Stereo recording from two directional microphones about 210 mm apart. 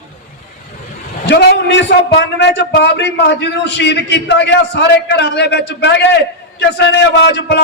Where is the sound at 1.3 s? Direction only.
55° left (ahead or behind).